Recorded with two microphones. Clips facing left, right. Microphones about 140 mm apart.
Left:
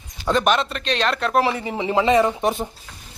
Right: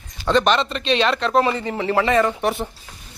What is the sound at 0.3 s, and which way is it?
Speech, 5° left (ahead or behind).